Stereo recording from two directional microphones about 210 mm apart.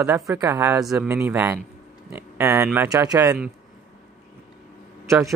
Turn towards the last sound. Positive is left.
turn(degrees=-15)  # may be behind; listen again after turning